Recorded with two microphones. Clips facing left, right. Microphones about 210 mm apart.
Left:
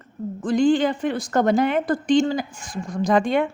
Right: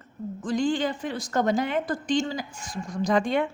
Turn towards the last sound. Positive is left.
turn(degrees=60)  # may be behind; listen again after turning